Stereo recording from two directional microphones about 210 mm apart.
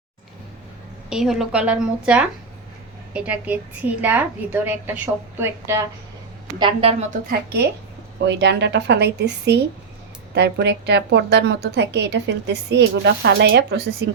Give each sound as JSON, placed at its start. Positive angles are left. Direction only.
{"t": 1.1, "sound": "a woman's voice", "side_deg": 0}
{"t": 6.6, "sound": "a woman's voice", "side_deg": -25}
{"t": 7.3, "sound": "a woman's voice", "side_deg": -50}